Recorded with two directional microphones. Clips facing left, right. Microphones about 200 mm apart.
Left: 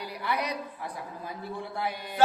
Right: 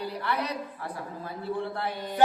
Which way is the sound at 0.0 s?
15° left (ahead or behind).